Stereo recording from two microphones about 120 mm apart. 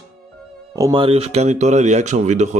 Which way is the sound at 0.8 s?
35° right (ahead or behind).